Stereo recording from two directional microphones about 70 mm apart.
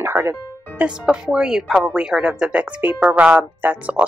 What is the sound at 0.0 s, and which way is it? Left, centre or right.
Music, right.